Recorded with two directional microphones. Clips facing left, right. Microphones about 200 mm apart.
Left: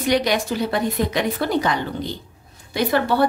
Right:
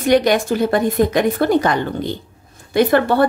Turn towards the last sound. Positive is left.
turn(degrees=-55)  # may be behind; listen again after turning